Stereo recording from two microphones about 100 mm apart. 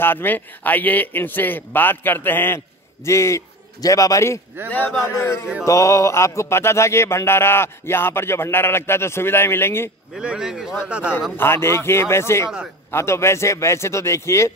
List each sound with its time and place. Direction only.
0.0 s a man's voice: 20° left (ahead or behind)
4.6 s speech: 15° left (ahead or behind)
5.0 s a man's voice: 25° left (ahead or behind)
10.1 s speech: 5° right (ahead or behind)
11.3 s a man's voice: 25° left (ahead or behind)